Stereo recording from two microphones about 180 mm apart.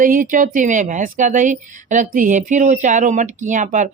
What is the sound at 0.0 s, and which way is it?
Speech, 50° right (ahead or behind).